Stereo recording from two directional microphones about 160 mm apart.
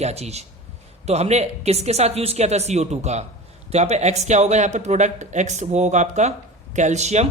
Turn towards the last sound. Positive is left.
turn(degrees=-45)  # may be behind; listen again after turning